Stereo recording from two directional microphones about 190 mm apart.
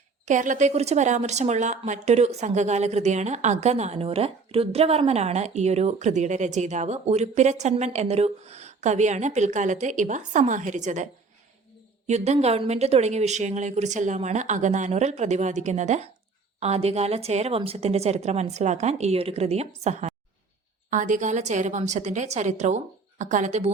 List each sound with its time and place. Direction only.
0.3 s speech: 40° right (ahead or behind)